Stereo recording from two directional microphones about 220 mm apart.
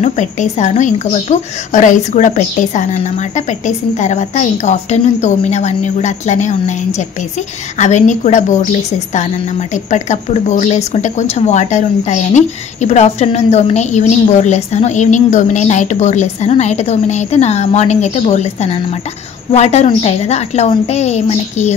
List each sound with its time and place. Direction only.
0.0 s speech: 35° left (ahead or behind)
9.8 s a woman's voice: 30° left (ahead or behind)